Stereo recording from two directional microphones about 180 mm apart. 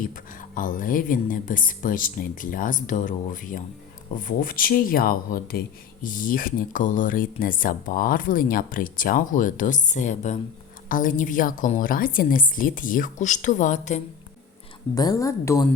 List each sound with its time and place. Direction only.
0.0 s speech: 50° left (ahead or behind)
14.9 s a woman's voice: 20° left (ahead or behind)